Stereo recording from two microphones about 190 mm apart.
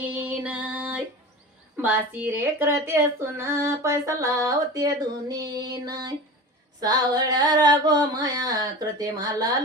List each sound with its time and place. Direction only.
0.1 s female singing: 10° right (ahead or behind)
1.7 s speech: 10° right (ahead or behind)
5.3 s a sound: 20° right (ahead or behind)